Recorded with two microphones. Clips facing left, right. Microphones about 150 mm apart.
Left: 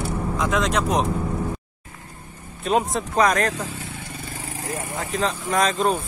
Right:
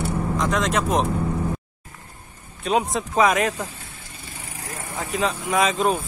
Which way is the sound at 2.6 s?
Centre (ahead or behind).